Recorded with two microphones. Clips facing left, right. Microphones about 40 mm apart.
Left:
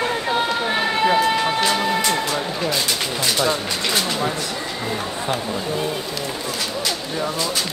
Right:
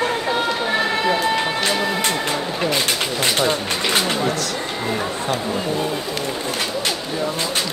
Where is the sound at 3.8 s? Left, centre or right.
Right.